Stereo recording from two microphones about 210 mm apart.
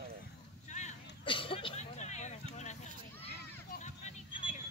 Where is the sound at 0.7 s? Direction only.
30° left (ahead or behind).